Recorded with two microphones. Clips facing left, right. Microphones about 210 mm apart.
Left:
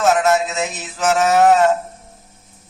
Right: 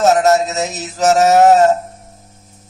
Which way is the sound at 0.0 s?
40° right (ahead or behind).